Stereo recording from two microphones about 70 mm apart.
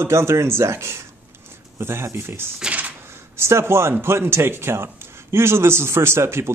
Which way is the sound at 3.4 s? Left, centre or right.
Right.